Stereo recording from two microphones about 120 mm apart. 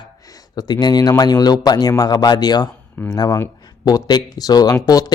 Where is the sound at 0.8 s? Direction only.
35° left (ahead or behind).